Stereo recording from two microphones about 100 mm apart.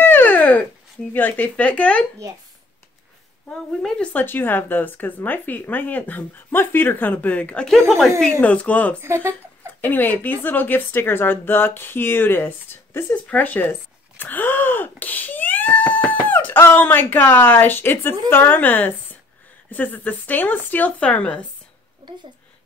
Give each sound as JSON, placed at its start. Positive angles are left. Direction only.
{"t": 0.0, "sound": "dog", "side_deg": 20}
{"t": 1.1, "sound": "speech", "side_deg": 20}
{"t": 3.4, "sound": "a woman's voice", "side_deg": 10}
{"t": 9.0, "sound": "speech", "side_deg": -25}
{"t": 9.8, "sound": "a woman's voice", "side_deg": 20}